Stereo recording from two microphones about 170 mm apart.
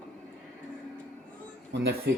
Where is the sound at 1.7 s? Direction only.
85° right.